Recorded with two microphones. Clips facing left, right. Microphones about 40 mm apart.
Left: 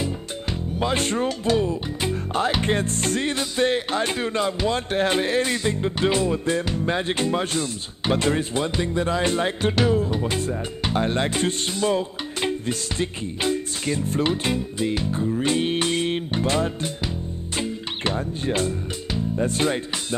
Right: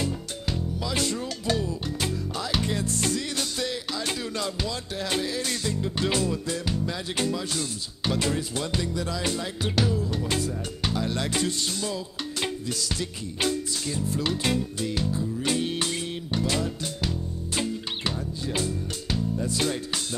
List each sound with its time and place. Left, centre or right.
0.7 s speech: left
2.6 s speech: left
4.1 s speech: left
5.4 s speech: left
9.8 s music: left
10.1 s speech: left
10.4 s speech: left
12.4 s music: left
14.2 s speech: left
15.0 s music: left
18.0 s speech: left